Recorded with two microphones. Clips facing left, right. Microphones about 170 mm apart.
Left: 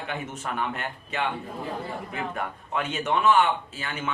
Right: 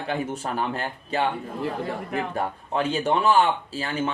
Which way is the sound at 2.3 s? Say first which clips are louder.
Right 4 dB; 35° right (ahead or behind).